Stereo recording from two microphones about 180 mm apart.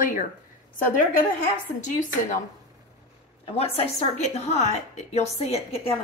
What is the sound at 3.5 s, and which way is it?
A woman's voice, 35° left (ahead or behind).